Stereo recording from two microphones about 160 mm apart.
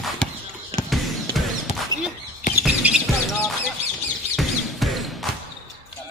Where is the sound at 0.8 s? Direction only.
Centre (ahead or behind).